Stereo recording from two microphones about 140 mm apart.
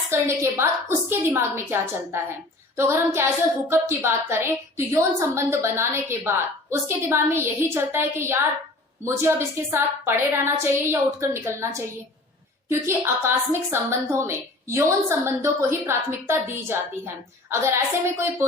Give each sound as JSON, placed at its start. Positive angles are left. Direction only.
{"t": 0.1, "sound": "child singing", "side_deg": -20}
{"t": 9.7, "sound": "a woman's voice", "side_deg": -15}
{"t": 15.9, "sound": "child singing", "side_deg": -15}